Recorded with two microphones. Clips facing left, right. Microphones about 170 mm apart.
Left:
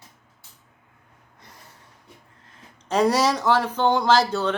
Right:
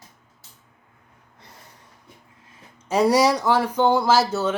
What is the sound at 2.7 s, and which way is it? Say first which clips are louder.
Speech: right 2 dB; 10° right (ahead or behind).